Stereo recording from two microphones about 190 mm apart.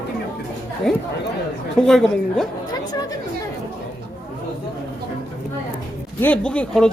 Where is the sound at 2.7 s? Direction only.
20° left (ahead or behind).